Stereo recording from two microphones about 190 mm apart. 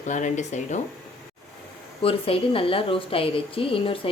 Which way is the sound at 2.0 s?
30° left (ahead or behind).